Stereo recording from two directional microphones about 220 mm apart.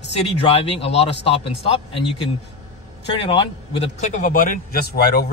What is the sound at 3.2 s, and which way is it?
A man's voice, 25° left (ahead or behind).